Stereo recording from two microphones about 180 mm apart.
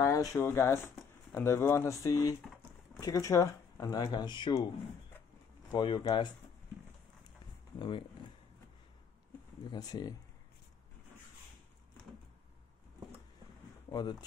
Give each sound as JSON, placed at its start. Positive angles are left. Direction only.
{"t": 0.0, "sound": "speech", "side_deg": 20}
{"t": 5.7, "sound": "speech", "side_deg": 25}
{"t": 9.7, "sound": "speech", "side_deg": 20}
{"t": 13.8, "sound": "speech", "side_deg": 25}